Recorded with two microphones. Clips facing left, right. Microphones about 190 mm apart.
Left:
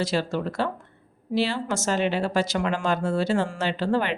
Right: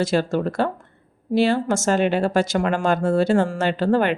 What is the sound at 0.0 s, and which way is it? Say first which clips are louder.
Speech: right 5 dB; 50° right (ahead or behind).